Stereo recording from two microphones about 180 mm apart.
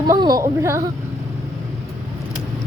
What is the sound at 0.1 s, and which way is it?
Speech, 20° right (ahead or behind).